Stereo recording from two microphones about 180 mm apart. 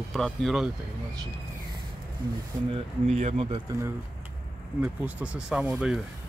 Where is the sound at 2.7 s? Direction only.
40° right (ahead or behind).